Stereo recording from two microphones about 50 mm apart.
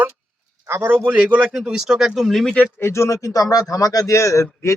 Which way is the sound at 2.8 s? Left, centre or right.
Left.